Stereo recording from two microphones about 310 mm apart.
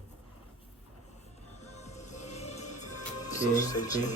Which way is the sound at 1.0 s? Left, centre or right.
Left.